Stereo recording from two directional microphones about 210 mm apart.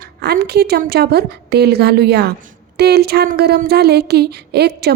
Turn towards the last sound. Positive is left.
turn(degrees=-50)  # may be behind; listen again after turning